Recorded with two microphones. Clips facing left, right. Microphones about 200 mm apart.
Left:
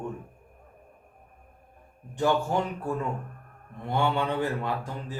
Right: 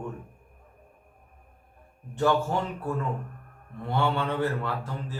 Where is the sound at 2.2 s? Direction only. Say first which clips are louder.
Right 1 dB; 15° left (ahead or behind).